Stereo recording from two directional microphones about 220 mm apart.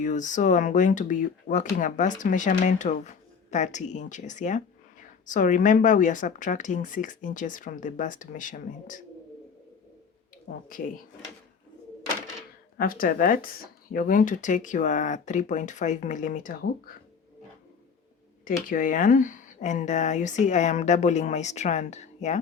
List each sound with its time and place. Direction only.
0.0 s speech: 35° left (ahead or behind)
10.5 s speech: 40° left (ahead or behind)
12.7 s speech: 40° left (ahead or behind)
18.4 s speech: 40° left (ahead or behind)